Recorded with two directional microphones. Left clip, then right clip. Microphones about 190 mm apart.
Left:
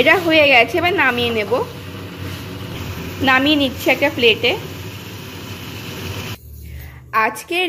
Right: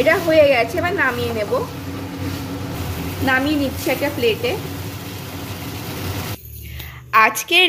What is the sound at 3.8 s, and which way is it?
Speech, 25° left (ahead or behind).